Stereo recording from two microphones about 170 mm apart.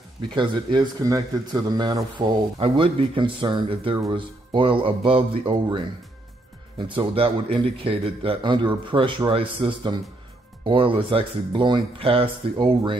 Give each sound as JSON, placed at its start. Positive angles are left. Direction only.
{"t": 0.3, "sound": "a man's voice", "side_deg": -25}